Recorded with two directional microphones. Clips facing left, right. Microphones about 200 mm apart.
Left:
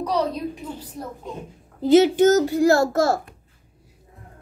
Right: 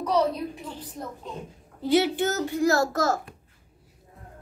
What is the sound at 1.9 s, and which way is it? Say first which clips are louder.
A child's voice: left 8 dB; 40° left (ahead or behind).